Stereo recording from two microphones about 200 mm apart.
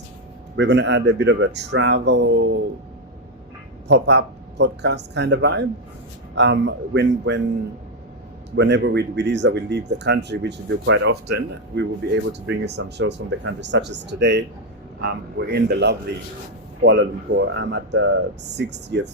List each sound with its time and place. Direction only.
0.5 s speech: 60° right (ahead or behind)
3.8 s speech: 60° right (ahead or behind)
8.5 s speech: 60° right (ahead or behind)